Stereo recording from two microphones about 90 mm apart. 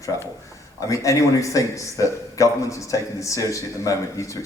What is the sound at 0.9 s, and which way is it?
Speech, 35° left (ahead or behind).